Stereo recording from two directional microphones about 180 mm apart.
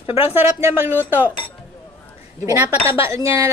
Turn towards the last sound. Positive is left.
turn(degrees=-15)  # may be behind; listen again after turning